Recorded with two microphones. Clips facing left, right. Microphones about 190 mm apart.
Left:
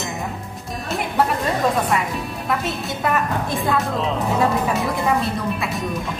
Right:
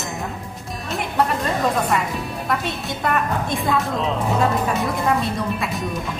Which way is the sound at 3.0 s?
Centre (ahead or behind).